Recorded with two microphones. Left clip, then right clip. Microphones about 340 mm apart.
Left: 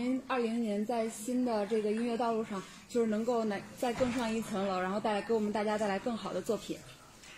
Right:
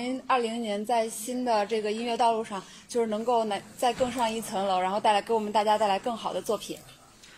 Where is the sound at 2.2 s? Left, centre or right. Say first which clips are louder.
Right 8 dB; right.